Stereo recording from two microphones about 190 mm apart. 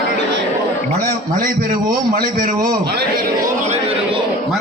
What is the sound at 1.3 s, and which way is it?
A man's voice, 45° right (ahead or behind).